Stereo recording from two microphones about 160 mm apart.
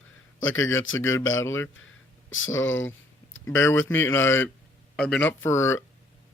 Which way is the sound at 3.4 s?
20° left (ahead or behind).